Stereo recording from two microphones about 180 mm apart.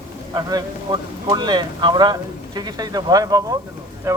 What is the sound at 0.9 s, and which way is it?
Speech, 25° right (ahead or behind).